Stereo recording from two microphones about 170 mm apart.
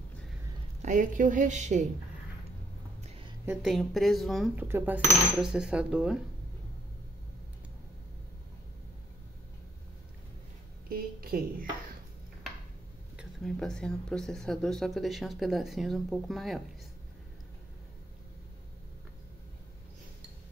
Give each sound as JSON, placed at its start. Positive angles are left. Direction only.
{"t": 0.8, "sound": "a woman's voice", "side_deg": -50}
{"t": 3.4, "sound": "speech", "side_deg": 0}
{"t": 4.6, "sound": "speech", "side_deg": -15}
{"t": 10.9, "sound": "a sound", "side_deg": -60}
{"t": 13.1, "sound": "speech", "side_deg": 0}